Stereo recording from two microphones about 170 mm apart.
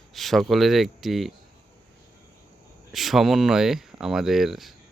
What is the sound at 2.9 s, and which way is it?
Speech, centre (ahead or behind).